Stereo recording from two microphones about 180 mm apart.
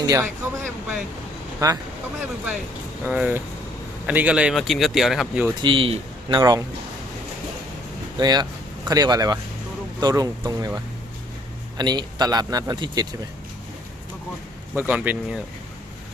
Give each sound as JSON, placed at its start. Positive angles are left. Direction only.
{"t": 0.0, "sound": "a sound", "side_deg": -15}
{"t": 1.5, "sound": "speech", "side_deg": -20}
{"t": 3.0, "sound": "speech", "side_deg": -10}
{"t": 5.6, "sound": "a man's voice", "side_deg": -30}
{"t": 8.2, "sound": "speech", "side_deg": -25}
{"t": 11.8, "sound": "speech", "side_deg": -25}
{"t": 14.8, "sound": "speech", "side_deg": -10}